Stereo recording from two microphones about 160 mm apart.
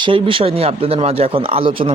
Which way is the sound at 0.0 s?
30° right (ahead or behind).